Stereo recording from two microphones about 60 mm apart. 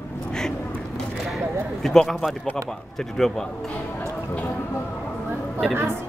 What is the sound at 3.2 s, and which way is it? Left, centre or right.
Speech, centre.